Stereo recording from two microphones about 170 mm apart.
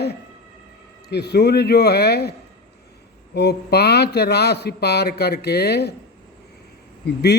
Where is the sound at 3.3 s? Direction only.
75° left (ahead or behind).